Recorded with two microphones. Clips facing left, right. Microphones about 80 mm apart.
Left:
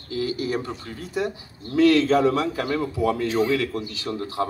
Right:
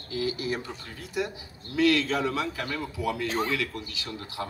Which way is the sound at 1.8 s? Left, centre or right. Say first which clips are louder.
Left 7 dB; left.